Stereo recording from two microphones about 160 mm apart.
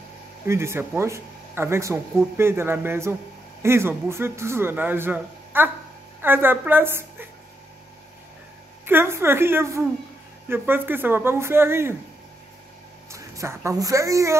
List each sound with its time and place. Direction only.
0.5 s speech: 15° right (ahead or behind)
8.8 s speech: 15° right (ahead or behind)
13.1 s speech: 15° right (ahead or behind)